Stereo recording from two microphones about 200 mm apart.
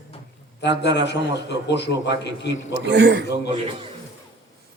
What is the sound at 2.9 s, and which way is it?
Speech, 60° right (ahead or behind).